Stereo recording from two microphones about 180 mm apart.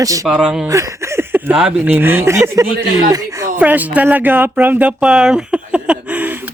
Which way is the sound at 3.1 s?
20° right (ahead or behind).